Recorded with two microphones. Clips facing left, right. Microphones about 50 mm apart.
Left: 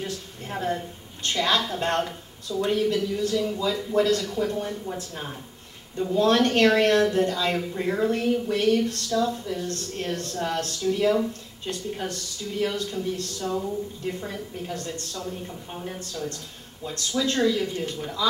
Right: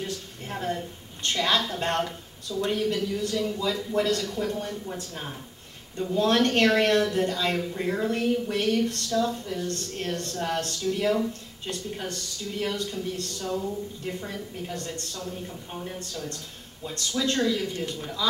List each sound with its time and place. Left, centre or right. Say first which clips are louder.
0.0 s a woman's voice: left 1 dB; centre
4.1 s a woman's voice: left 3 dB; centre
12.9 s a woman's voice: left 3 dB; centre
13.7 s speech: left 2 dB; centre
15.4 s a woman's voice: left 1 dB; centre